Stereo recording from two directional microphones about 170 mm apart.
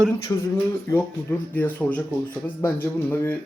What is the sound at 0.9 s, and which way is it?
Speech, 15° left (ahead or behind).